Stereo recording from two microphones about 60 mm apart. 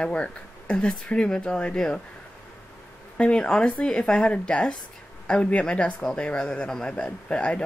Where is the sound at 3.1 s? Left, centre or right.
Centre.